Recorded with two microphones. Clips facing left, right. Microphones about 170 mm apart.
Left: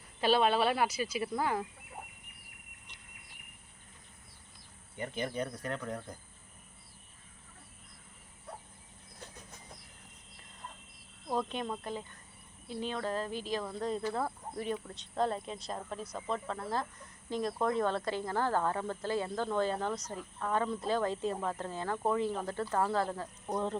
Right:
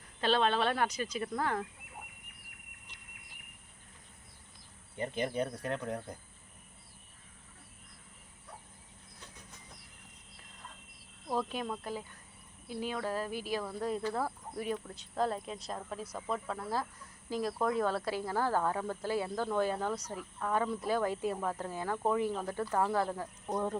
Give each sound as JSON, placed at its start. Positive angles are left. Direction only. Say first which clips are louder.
{"t": 0.2, "sound": "speech", "louder": "left 2 dB", "side_deg": 10}
{"t": 2.9, "sound": "a sound", "louder": "even", "side_deg": -5}
{"t": 4.9, "sound": "speech", "louder": "right 2 dB", "side_deg": -30}
{"t": 11.3, "sound": "speech", "louder": "even", "side_deg": -5}